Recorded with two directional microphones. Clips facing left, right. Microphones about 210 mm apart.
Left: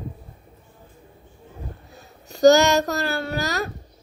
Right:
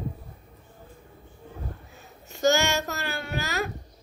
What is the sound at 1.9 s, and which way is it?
A child's voice, 35° left (ahead or behind).